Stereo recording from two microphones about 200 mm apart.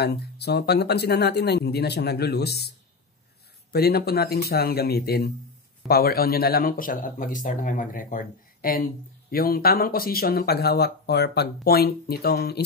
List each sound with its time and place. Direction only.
0.0 s speech: 55° left (ahead or behind)
3.7 s speech: 50° left (ahead or behind)